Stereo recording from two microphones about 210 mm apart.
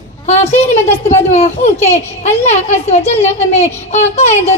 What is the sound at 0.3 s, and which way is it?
A child's voice, 30° left (ahead or behind).